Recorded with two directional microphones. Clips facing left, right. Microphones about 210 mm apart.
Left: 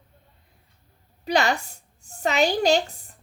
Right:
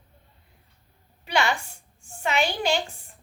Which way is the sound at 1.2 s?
40° left (ahead or behind).